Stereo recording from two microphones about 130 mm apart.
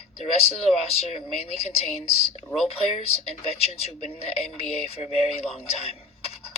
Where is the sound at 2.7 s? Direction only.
50° left (ahead or behind).